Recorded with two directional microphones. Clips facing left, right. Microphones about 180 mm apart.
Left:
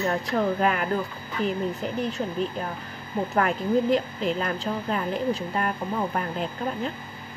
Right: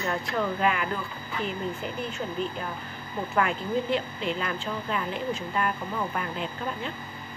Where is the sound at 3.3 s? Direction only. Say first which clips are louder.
Left 3 dB; 40° left (ahead or behind).